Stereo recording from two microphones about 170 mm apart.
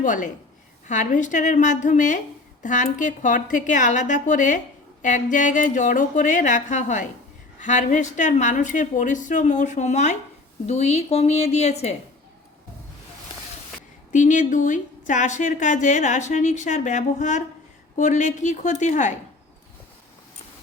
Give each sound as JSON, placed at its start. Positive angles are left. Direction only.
{"t": 0.0, "sound": "a woman's voice", "side_deg": 50}
{"t": 14.1, "sound": "speech", "side_deg": 50}